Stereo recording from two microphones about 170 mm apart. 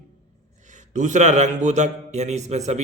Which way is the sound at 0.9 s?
45° right (ahead or behind).